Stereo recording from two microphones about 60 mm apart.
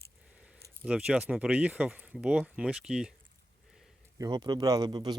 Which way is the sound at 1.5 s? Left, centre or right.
Right.